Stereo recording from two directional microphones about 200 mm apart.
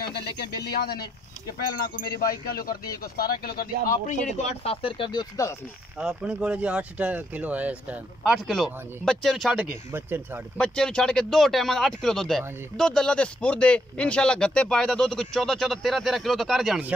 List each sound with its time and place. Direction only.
0.1 s speech: 55° left (ahead or behind); by 5.6 s 20° left (ahead or behind)
5.9 s speech: 5° right (ahead or behind)
10.6 s speech: 5° left (ahead or behind)